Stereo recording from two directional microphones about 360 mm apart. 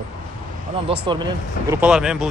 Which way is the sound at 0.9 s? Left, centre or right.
Centre.